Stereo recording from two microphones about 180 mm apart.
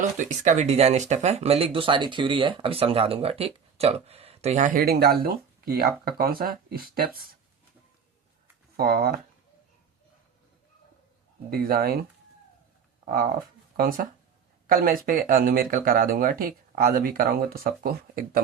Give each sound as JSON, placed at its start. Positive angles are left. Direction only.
{"t": 0.0, "sound": "speech", "side_deg": -40}
{"t": 4.9, "sound": "speech", "side_deg": -60}
{"t": 8.7, "sound": "speech", "side_deg": -60}
{"t": 11.5, "sound": "speech", "side_deg": -55}
{"t": 13.7, "sound": "speech", "side_deg": -50}